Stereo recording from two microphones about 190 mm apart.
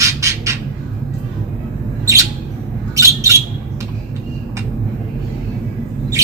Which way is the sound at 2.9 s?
15° right (ahead or behind).